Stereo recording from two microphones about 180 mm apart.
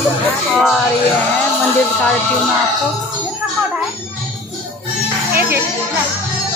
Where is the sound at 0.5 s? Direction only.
Centre (ahead or behind).